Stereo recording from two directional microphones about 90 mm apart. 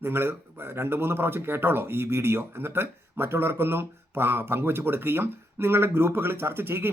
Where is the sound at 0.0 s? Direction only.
25° right (ahead or behind).